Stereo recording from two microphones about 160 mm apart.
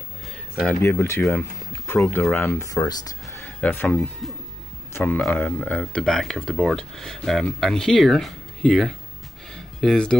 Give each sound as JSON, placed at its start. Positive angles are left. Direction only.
{"t": 0.6, "sound": "speech", "side_deg": 10}
{"t": 3.4, "sound": "speech", "side_deg": 10}
{"t": 9.5, "sound": "a sound", "side_deg": 0}